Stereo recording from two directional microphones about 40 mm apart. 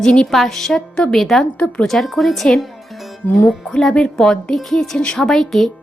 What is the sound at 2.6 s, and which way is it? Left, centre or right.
Music, centre.